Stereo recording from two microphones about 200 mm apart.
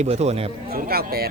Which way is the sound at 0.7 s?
50° right (ahead or behind).